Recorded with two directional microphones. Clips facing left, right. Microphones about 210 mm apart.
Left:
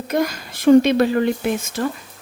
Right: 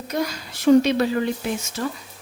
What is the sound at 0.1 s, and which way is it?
Speech, 50° left (ahead or behind).